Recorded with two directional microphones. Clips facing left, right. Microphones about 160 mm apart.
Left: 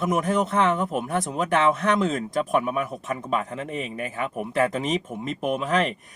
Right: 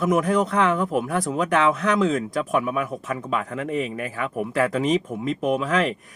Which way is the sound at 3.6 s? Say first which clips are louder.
Right 6 dB; 40° right (ahead or behind).